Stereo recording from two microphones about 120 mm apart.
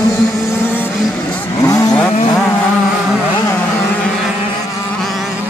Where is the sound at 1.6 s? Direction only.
25° left (ahead or behind).